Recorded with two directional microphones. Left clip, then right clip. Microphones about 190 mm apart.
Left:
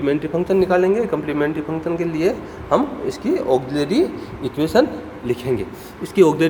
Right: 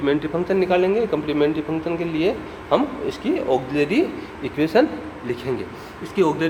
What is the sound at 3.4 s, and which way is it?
A man's voice, 25° left (ahead or behind).